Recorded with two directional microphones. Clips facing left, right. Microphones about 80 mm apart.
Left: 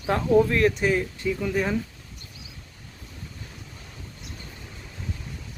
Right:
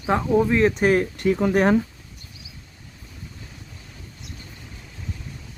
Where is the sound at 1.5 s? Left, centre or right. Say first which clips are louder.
Right 8 dB; right.